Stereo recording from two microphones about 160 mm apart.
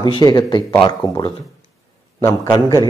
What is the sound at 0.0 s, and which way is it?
Speech, 30° left (ahead or behind).